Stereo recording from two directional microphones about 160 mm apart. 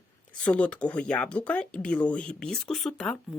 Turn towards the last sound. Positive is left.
turn(degrees=5)  # may be behind; listen again after turning